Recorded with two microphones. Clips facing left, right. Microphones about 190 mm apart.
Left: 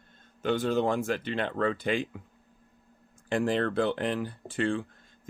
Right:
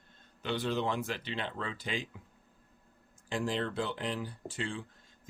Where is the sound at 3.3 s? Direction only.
60° left (ahead or behind).